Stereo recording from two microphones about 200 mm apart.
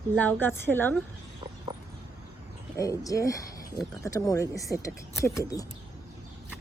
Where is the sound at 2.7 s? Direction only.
15° left (ahead or behind).